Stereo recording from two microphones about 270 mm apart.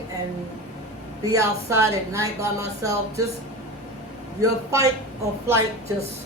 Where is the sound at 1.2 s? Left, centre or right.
Centre.